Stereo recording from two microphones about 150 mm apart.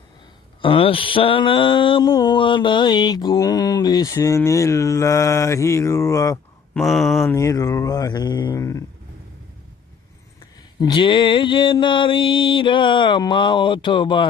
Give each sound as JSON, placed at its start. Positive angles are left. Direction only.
{"t": 0.6, "sound": "mantra", "side_deg": 40}
{"t": 6.7, "sound": "speech", "side_deg": 0}
{"t": 7.3, "sound": "mantra", "side_deg": 20}
{"t": 10.4, "sound": "a sound", "side_deg": 30}